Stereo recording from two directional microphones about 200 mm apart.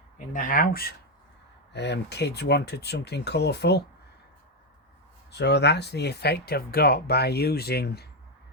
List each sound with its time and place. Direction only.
0.3 s speech: 45° left (ahead or behind)
1.7 s speech: 60° left (ahead or behind)
5.3 s speech: 55° left (ahead or behind)